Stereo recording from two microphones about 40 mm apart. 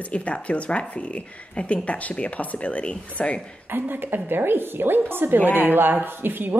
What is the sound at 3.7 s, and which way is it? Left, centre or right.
A woman's voice, right.